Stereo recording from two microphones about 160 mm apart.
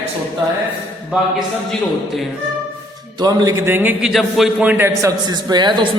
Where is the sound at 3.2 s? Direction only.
25° right (ahead or behind).